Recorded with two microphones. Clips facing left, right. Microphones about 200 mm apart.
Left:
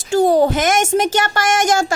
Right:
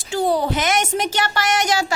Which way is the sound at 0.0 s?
45° left (ahead or behind).